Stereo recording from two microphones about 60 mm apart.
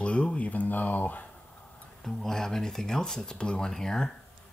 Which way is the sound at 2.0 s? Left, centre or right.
Centre.